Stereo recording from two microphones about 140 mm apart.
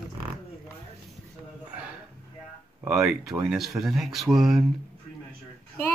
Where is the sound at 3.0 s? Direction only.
5° right (ahead or behind).